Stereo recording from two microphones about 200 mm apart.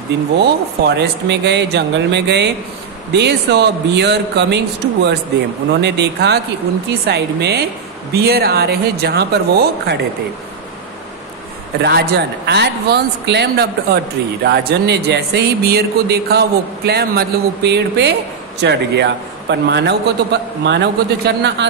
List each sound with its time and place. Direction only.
0.4 s speech: 55° right (ahead or behind)
11.8 s speech: 55° right (ahead or behind)